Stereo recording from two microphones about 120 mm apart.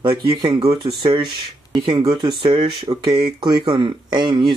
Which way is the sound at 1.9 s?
40° right (ahead or behind).